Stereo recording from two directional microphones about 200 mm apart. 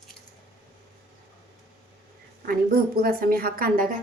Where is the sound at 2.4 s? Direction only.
45° right (ahead or behind).